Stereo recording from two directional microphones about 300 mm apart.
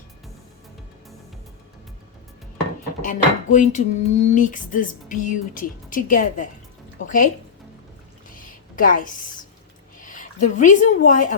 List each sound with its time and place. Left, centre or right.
3.0 s speech: left
8.4 s a sound: left
10.0 s a woman's voice: left